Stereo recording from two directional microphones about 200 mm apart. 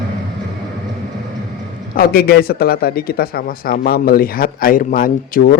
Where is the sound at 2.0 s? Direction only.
50° left (ahead or behind).